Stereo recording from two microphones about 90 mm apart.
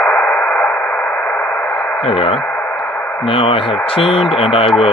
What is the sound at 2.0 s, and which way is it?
Speech, 90° left.